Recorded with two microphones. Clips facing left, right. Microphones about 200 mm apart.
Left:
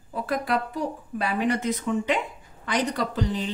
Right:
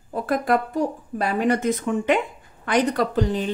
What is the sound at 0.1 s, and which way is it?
Speech, 50° right (ahead or behind).